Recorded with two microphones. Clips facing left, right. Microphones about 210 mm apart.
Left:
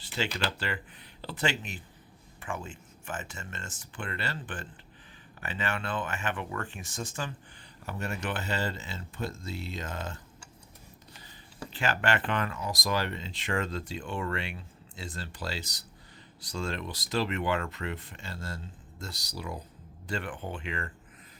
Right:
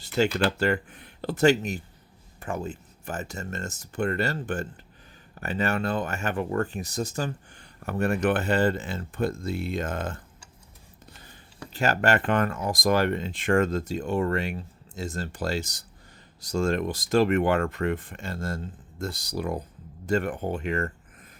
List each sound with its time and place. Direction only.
0.0 s speech: 45° right (ahead or behind)
7.9 s speech: 55° right (ahead or behind)
11.7 s speech: 40° right (ahead or behind)